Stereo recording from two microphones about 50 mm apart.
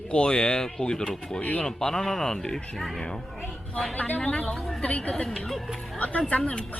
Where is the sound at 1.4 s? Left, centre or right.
Left.